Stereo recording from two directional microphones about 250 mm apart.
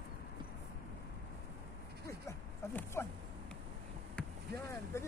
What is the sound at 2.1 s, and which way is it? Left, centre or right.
Dog, centre.